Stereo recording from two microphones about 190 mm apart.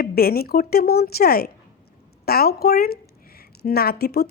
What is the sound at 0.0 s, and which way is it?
A woman's voice, 55° left (ahead or behind).